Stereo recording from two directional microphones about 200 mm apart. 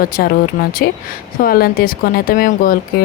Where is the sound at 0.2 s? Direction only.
50° left (ahead or behind).